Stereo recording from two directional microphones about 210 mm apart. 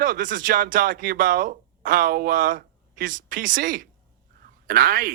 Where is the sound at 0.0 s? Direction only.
40° right (ahead or behind).